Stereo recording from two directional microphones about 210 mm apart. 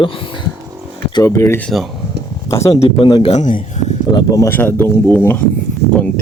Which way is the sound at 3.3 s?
35° left (ahead or behind).